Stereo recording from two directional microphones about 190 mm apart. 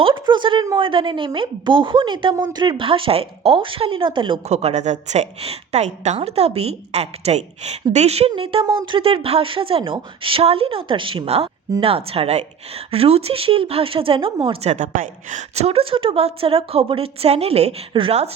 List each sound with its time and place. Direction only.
0.0 s a woman's voice: 25° right (ahead or behind)